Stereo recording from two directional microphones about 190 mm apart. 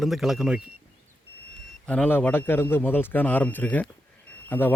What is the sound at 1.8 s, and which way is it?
Speech, 5° left (ahead or behind).